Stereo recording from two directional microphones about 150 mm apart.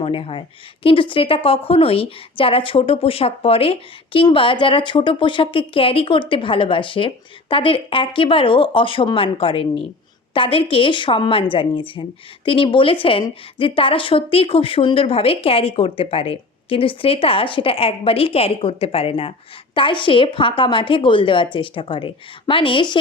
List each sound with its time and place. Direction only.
0.0 s speech: 40° left (ahead or behind)